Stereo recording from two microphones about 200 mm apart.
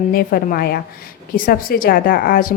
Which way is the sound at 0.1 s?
50° left (ahead or behind).